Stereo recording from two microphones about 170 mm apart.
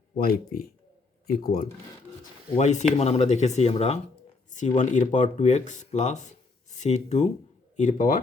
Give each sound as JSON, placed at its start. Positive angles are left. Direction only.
{"t": 0.2, "sound": "speech", "side_deg": 60}
{"t": 2.6, "sound": "speech", "side_deg": 45}